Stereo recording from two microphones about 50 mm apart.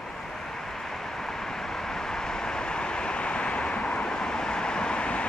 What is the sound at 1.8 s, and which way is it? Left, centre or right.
Vehicle, centre.